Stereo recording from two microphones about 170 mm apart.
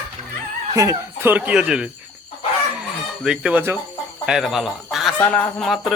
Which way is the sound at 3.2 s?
5° right (ahead or behind).